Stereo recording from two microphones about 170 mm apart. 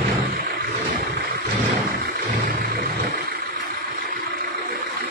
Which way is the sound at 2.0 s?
60° right (ahead or behind).